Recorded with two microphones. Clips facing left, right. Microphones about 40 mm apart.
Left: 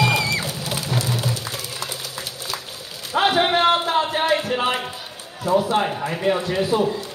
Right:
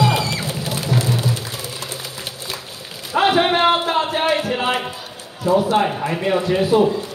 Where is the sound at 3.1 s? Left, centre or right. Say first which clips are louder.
Right 2 dB; centre.